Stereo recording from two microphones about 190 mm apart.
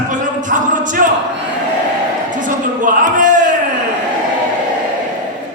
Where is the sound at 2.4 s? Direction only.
45° right (ahead or behind).